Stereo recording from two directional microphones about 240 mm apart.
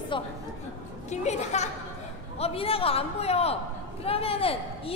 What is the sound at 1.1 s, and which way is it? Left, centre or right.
A man's voice, left.